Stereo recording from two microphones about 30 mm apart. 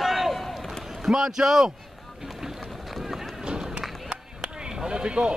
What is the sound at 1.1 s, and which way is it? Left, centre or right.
Speech, centre.